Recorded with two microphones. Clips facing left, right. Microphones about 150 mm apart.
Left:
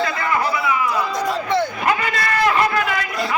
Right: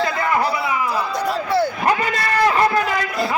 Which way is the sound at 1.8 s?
35° right (ahead or behind).